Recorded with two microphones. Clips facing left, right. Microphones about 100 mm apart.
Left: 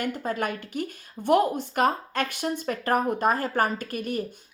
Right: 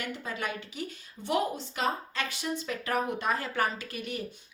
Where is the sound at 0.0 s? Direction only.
45° left (ahead or behind).